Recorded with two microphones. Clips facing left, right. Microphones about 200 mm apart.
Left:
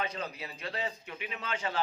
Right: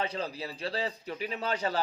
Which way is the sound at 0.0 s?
30° right (ahead or behind).